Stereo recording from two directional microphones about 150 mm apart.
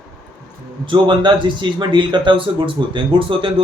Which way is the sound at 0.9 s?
30° right (ahead or behind).